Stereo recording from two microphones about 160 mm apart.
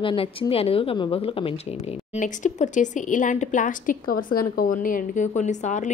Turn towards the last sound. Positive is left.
turn(degrees=50)  # may be behind; listen again after turning